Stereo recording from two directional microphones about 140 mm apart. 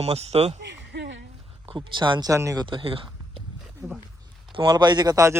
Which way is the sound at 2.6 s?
40° right (ahead or behind).